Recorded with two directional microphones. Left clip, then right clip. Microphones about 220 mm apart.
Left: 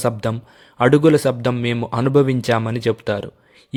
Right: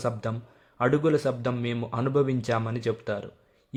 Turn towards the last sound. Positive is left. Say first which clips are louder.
# left 9 dB
turn(degrees=40)  # may be behind; listen again after turning